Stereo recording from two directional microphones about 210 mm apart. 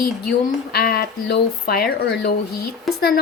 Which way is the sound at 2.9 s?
Centre (ahead or behind).